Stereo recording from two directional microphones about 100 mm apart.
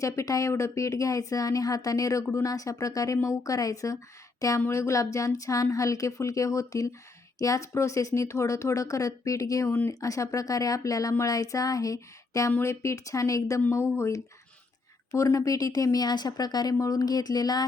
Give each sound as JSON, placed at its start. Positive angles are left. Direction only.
{"t": 0.0, "sound": "speech", "side_deg": 35}